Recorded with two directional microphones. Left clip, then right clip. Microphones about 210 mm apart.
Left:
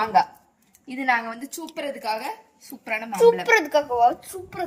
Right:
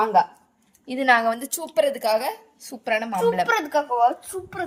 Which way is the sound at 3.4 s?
25° left (ahead or behind).